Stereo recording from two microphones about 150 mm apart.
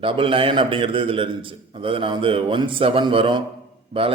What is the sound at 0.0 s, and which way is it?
A man's voice, 35° right (ahead or behind).